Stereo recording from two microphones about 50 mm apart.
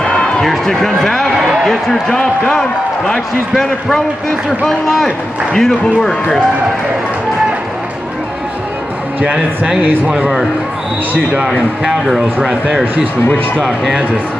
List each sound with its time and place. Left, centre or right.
0.0 s a sound: centre
0.5 s speech: centre
4.5 s a man's voice: centre
9.2 s speech: right
12.1 s speech: centre